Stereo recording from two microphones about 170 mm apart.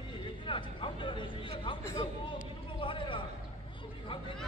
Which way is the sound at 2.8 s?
30° left (ahead or behind).